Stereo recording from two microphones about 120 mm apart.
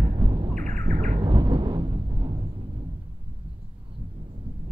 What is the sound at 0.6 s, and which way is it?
Bird, 90° right.